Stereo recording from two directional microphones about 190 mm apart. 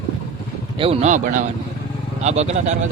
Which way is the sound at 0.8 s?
35° right (ahead or behind).